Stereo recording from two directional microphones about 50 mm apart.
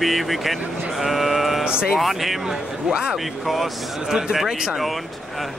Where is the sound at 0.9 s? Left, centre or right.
Centre.